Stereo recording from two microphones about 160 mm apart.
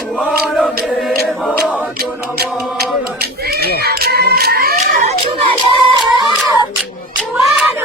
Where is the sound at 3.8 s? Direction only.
75° right (ahead or behind).